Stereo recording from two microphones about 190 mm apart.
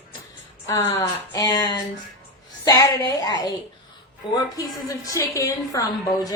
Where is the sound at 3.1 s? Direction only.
20° left (ahead or behind).